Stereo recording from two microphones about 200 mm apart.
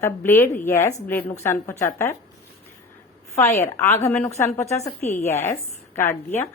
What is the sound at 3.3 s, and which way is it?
Speech, 15° left (ahead or behind).